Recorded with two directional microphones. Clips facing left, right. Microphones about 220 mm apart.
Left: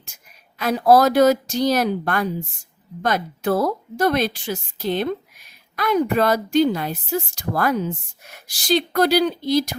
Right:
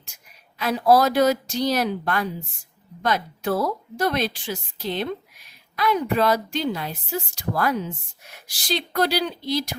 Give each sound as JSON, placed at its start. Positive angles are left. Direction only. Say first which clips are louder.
{"t": 0.6, "sound": "a woman's voice", "louder": "left 3 dB", "side_deg": 45}